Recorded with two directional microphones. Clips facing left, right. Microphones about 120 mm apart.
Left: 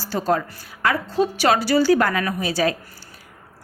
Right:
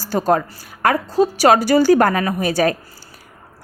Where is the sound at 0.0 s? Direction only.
45° right (ahead or behind).